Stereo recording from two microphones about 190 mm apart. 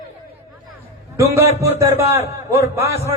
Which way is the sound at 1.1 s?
15° right (ahead or behind).